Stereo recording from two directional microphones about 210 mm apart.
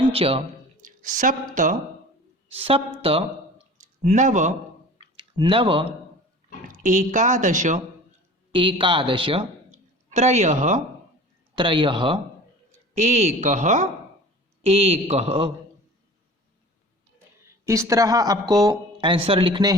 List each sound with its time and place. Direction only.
0.1 s speech: 25° right (ahead or behind)
2.5 s speech: 25° right (ahead or behind)
5.1 s speech: 25° right (ahead or behind)
6.7 s speech: 35° right (ahead or behind)
8.5 s speech: 25° right (ahead or behind)
11.5 s speech: 25° right (ahead or behind)
17.7 s speech: 15° right (ahead or behind)